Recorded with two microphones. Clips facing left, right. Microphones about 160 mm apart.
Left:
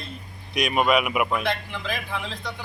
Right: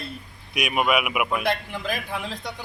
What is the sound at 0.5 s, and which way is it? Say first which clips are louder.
Speech: left 2 dB; 10° right (ahead or behind).